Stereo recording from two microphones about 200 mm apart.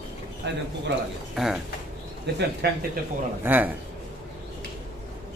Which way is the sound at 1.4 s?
Centre (ahead or behind).